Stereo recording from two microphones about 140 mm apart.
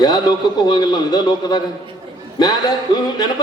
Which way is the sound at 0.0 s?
30° left (ahead or behind).